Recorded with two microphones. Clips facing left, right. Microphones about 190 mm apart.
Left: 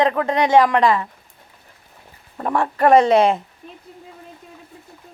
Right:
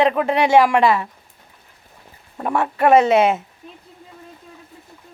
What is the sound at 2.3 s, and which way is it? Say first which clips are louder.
Speech: even; 5° right (ahead or behind).